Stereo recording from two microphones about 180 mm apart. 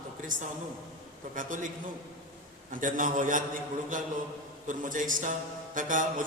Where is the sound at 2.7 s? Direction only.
45° right (ahead or behind).